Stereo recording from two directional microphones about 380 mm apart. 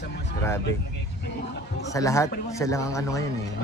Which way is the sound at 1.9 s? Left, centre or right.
Centre.